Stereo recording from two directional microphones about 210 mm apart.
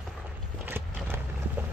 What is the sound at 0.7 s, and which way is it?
Vehicle, 10° right (ahead or behind).